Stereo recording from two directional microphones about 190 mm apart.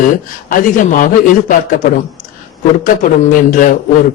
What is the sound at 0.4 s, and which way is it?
A man's voice, 45° left (ahead or behind).